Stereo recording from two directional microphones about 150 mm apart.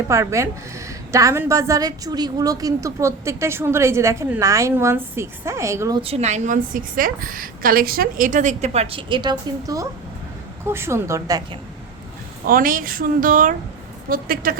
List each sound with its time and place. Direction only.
0.1 s a woman's voice: 20° right (ahead or behind)
6.0 s a woman's voice: 45° right (ahead or behind); by 11.4 s 20° right (ahead or behind)
12.5 s a woman's voice: 70° right (ahead or behind)
14.1 s a woman's voice: 75° right (ahead or behind)